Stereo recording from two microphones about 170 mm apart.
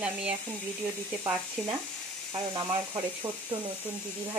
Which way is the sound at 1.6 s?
Centre (ahead or behind).